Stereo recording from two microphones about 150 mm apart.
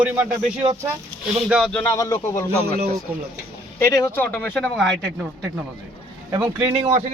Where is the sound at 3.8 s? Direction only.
20° left (ahead or behind).